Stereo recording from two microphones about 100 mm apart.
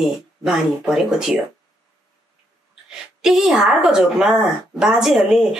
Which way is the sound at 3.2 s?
5° right (ahead or behind).